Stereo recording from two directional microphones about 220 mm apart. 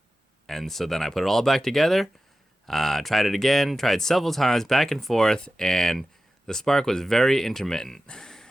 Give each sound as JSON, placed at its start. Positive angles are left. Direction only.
{"t": 0.4, "sound": "speech", "side_deg": 0}